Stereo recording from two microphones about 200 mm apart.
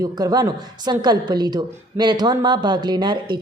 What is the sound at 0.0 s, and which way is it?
A woman's voice, 20° right (ahead or behind).